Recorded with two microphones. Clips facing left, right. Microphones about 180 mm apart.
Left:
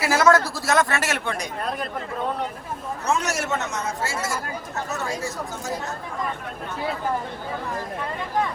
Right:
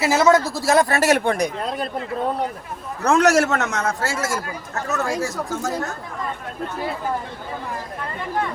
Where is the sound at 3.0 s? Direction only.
90° right.